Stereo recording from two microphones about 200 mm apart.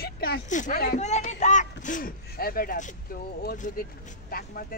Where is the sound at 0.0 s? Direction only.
50° left (ahead or behind).